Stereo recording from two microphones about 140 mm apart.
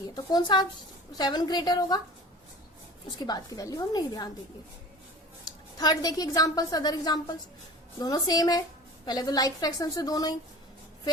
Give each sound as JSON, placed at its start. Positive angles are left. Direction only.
{"t": 0.1, "sound": "a woman's voice", "side_deg": 30}
{"t": 3.2, "sound": "a woman's voice", "side_deg": 25}
{"t": 5.5, "sound": "a woman's voice", "side_deg": 30}